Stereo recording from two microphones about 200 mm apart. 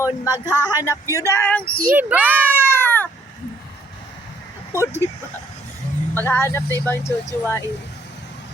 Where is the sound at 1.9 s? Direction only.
10° right (ahead or behind).